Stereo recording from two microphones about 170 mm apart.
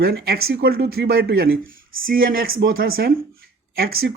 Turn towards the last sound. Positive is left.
turn(degrees=-65)  # may be behind; listen again after turning